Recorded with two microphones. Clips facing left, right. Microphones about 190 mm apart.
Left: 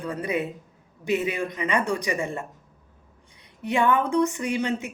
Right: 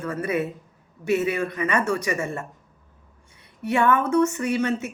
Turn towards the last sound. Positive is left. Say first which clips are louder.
# right 2 dB
turn(degrees=15)  # may be behind; listen again after turning